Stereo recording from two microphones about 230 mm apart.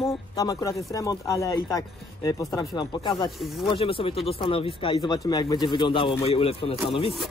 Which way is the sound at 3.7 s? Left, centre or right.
Left.